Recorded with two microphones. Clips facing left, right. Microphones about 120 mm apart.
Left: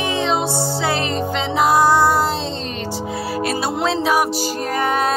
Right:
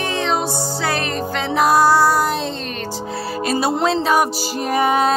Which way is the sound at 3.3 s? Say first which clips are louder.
Right 3 dB; centre (ahead or behind).